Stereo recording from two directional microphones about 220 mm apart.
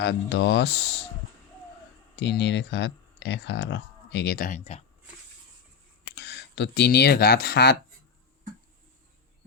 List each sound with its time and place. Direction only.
0.0 s speech: 55° left (ahead or behind)
2.1 s speech: 55° left (ahead or behind); by 4.8 s 35° left (ahead or behind)
6.1 s speech: 50° left (ahead or behind)